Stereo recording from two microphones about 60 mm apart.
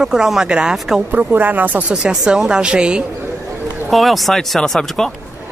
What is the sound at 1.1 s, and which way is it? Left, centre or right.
Speech, right.